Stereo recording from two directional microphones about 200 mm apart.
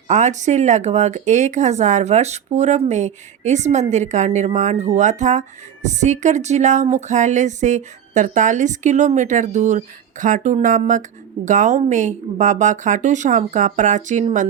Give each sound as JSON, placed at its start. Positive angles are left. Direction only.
{"t": 0.1, "sound": "speech", "side_deg": -35}